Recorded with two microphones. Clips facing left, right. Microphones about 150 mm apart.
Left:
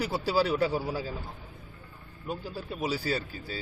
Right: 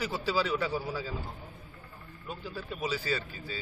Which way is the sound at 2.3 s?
35° left (ahead or behind).